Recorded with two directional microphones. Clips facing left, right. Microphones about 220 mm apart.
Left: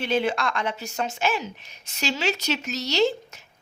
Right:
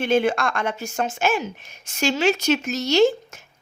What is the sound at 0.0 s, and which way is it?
A woman's voice, 50° right (ahead or behind).